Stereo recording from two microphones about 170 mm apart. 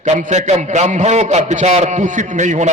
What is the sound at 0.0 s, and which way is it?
A man's voice, 40° right (ahead or behind).